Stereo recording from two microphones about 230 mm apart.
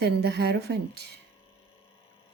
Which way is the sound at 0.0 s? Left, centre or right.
Right.